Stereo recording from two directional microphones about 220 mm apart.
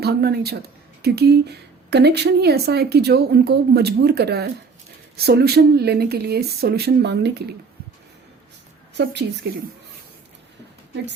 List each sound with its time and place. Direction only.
0.0 s speech: 45° right (ahead or behind)
9.0 s speech: 50° right (ahead or behind)